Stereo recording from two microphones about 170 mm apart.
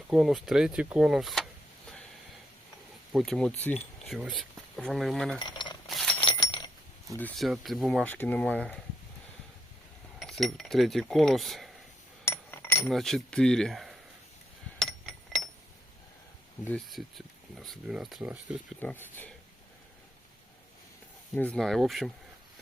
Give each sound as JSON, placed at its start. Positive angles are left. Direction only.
{"t": 0.1, "sound": "speech", "side_deg": 0}
{"t": 3.1, "sound": "speech", "side_deg": 0}
{"t": 5.4, "sound": "speech", "side_deg": 25}
{"t": 5.9, "sound": "a sound", "side_deg": 0}
{"t": 6.1, "sound": "glass", "side_deg": 25}
{"t": 7.2, "sound": "speech", "side_deg": 5}
{"t": 8.0, "sound": "speech", "side_deg": 10}
{"t": 10.2, "sound": "cutlery", "side_deg": 0}
{"t": 12.2, "sound": "chink", "side_deg": 15}
{"t": 12.9, "sound": "speech", "side_deg": 0}
{"t": 14.8, "sound": "a sound", "side_deg": 0}
{"t": 16.6, "sound": "speech", "side_deg": 0}
{"t": 18.8, "sound": "speech", "side_deg": 10}
{"t": 21.3, "sound": "speech", "side_deg": 5}